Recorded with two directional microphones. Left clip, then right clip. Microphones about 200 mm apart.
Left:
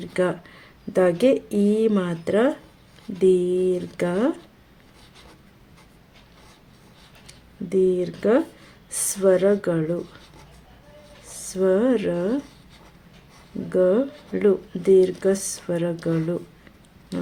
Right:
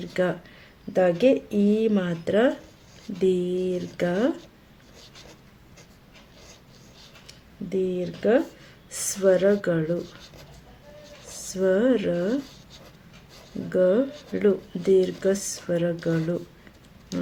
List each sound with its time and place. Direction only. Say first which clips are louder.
0.0 s speech: left 2 dB; 25° left (ahead or behind)
7.3 s speech: left 4 dB; 30° left (ahead or behind)
11.5 s speech: left 2 dB; 20° left (ahead or behind)
13.7 s speech: left 1 dB; 20° left (ahead or behind)